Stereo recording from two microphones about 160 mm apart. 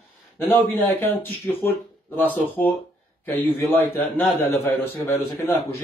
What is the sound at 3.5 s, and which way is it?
A man's voice, 10° left (ahead or behind).